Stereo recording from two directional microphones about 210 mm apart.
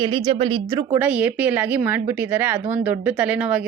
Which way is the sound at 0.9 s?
10° right (ahead or behind).